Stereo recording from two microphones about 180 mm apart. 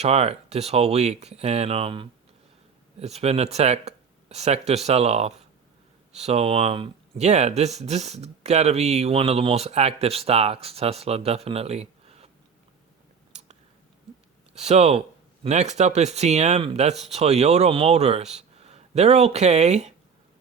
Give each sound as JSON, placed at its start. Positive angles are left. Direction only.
{"t": 0.0, "sound": "speech", "side_deg": -35}
{"t": 14.5, "sound": "speech", "side_deg": -35}